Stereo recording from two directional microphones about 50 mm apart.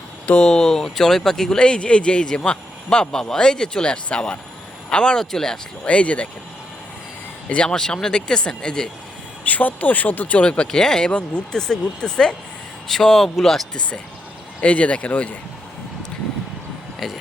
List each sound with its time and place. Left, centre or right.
0.3 s speech: centre
5.8 s speech: left
7.4 s speech: left
9.4 s speech: left
10.6 s speech: centre
14.6 s speech: left
17.0 s speech: centre